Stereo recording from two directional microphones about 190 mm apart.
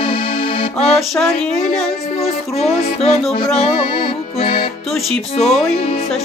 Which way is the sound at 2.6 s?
35° left (ahead or behind).